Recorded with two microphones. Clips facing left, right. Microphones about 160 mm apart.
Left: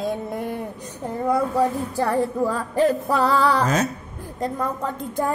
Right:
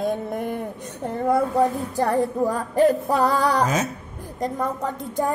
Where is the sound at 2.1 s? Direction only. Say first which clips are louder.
Even; 20° right (ahead or behind).